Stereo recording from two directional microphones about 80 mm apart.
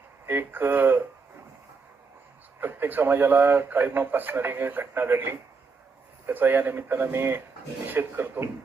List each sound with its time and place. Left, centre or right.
0.3 s a man's voice: right
2.6 s a man's voice: right